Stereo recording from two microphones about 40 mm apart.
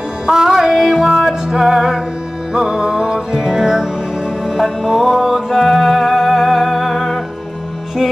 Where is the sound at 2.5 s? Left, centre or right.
Centre.